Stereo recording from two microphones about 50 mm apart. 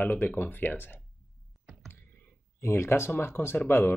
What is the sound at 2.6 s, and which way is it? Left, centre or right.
Speech, left.